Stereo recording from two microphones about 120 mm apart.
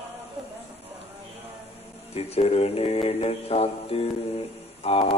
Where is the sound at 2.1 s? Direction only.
60° left (ahead or behind).